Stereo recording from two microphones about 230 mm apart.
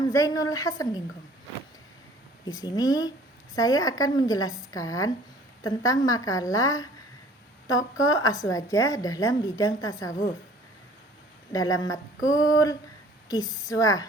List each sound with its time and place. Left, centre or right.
0.1 s a woman's voice: centre
2.5 s a woman's voice: centre
11.5 s a woman's voice: centre